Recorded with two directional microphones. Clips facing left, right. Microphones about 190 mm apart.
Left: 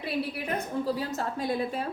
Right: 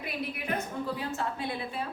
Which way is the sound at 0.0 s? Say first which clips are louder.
Left 4 dB; 30° left (ahead or behind).